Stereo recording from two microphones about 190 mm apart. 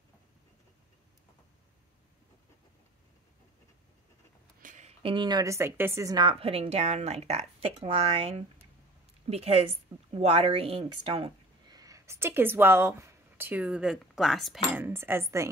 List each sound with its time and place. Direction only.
4.6 s speech: 40° right (ahead or behind)
11.7 s speech: 20° right (ahead or behind); by 14.9 s centre (ahead or behind)
14.9 s cutlery: 10° right (ahead or behind)